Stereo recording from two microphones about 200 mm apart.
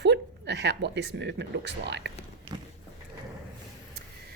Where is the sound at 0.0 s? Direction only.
60° right (ahead or behind).